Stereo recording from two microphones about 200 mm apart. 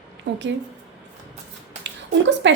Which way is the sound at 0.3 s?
60° right (ahead or behind).